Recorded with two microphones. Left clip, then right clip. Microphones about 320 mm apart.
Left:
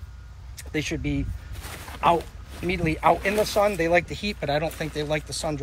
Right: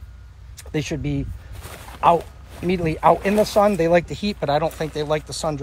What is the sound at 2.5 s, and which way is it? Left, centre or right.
Speech, right.